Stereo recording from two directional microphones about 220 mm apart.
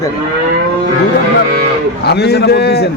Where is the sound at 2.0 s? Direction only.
50° left (ahead or behind).